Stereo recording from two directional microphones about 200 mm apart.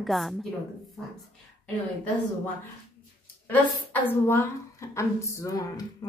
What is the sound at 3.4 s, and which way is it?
A woman's voice, 10° left (ahead or behind).